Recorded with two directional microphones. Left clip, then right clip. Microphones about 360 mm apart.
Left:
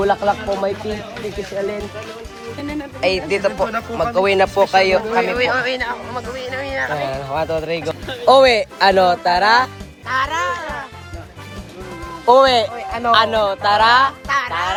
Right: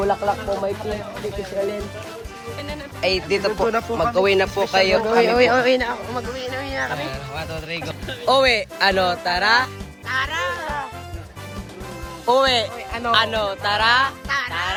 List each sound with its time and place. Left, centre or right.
0.1 s speech: left
3.0 s speech: centre
7.0 s speech: centre
8.0 s speech: centre
8.3 s speech: centre
10.1 s music: centre
12.2 s speech: centre